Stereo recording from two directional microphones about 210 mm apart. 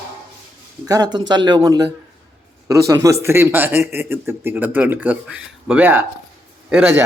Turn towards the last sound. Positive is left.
turn(degrees=-10)  # may be behind; listen again after turning